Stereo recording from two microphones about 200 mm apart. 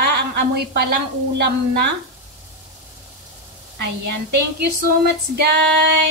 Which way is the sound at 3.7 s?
55° right (ahead or behind).